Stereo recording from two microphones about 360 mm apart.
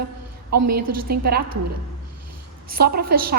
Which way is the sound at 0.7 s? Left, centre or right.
Right.